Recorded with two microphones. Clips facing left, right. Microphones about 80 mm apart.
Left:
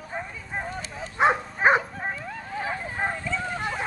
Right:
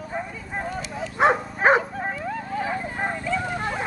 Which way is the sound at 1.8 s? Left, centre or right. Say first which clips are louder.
Right 3 dB; centre.